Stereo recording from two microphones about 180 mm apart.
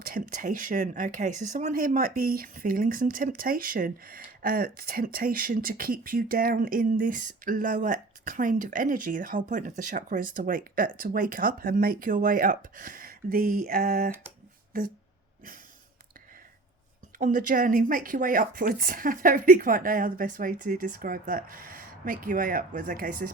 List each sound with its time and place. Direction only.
0.0 s speech: 50° right (ahead or behind)
17.2 s speech: 45° right (ahead or behind)